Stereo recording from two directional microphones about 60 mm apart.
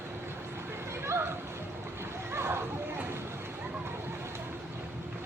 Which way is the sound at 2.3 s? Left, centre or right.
Right.